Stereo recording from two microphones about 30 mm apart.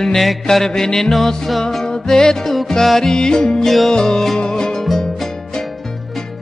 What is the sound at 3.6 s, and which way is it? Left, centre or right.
Music, centre.